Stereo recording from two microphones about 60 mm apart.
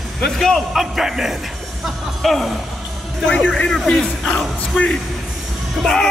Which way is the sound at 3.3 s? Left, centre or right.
Centre.